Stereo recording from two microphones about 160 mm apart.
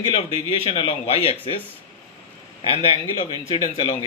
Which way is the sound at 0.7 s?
35° left (ahead or behind).